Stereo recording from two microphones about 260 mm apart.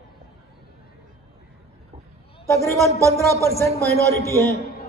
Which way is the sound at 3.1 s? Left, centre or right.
Centre.